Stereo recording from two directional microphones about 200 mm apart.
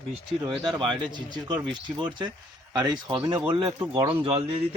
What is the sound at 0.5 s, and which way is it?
Speech, centre (ahead or behind).